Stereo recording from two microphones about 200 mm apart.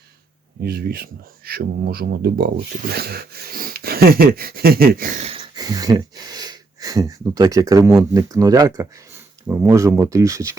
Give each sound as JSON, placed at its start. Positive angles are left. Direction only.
{"t": 0.6, "sound": "speech", "side_deg": -50}